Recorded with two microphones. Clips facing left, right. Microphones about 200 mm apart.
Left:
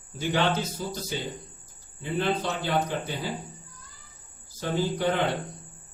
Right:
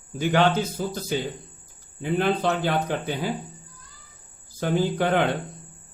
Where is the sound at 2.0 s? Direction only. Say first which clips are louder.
Right 5 dB; 55° right (ahead or behind).